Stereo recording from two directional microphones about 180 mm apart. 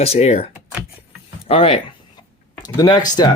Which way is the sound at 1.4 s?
35° left (ahead or behind).